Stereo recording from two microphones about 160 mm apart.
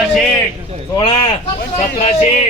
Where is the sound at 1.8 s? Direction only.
40° left (ahead or behind).